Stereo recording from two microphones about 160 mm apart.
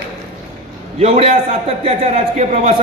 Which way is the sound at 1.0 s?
40° right (ahead or behind).